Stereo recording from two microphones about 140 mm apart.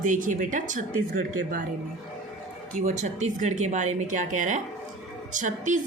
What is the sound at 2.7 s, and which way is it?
A woman's voice, 60° right (ahead or behind).